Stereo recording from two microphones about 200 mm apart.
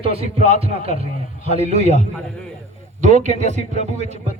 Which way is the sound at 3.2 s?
35° right (ahead or behind).